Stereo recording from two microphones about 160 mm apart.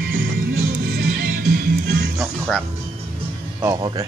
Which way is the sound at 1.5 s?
90° right.